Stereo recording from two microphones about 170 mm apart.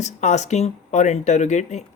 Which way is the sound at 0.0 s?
40° left (ahead or behind).